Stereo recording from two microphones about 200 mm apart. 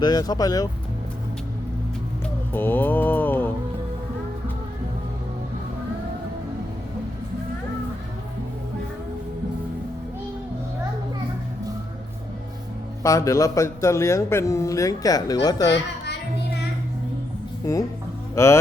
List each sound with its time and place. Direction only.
0.0 s speech: 20° left (ahead or behind)
2.5 s mantra: 10° left (ahead or behind)
13.0 s speech: 15° left (ahead or behind)
18.4 s speech: 15° left (ahead or behind)